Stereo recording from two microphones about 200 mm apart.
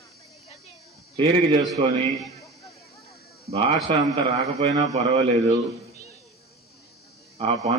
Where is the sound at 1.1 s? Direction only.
25° right (ahead or behind).